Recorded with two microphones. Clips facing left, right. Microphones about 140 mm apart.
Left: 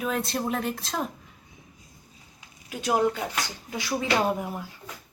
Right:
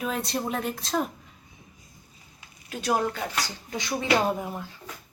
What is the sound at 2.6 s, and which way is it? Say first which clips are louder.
Speech: left 2 dB; 15° left (ahead or behind).